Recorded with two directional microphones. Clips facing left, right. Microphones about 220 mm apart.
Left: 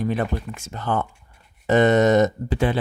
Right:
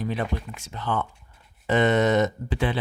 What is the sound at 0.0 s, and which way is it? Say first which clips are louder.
Speech: left 4 dB; 50° left (ahead or behind).